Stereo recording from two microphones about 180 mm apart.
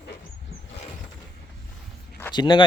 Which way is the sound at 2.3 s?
25° left (ahead or behind).